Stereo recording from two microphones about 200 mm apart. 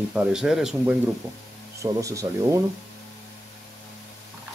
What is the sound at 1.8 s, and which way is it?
Speech, 15° right (ahead or behind).